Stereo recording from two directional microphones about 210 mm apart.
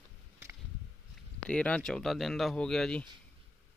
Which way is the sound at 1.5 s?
5° left (ahead or behind).